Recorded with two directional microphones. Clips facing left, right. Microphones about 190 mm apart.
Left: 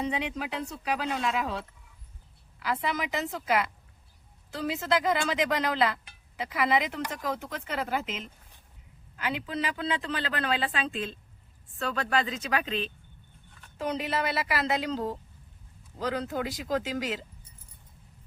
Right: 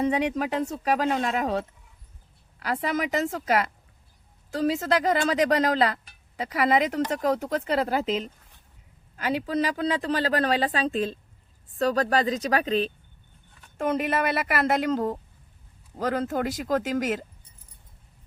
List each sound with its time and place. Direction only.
0.0 s speech: 45° right (ahead or behind)
13.7 s speech: 50° right (ahead or behind)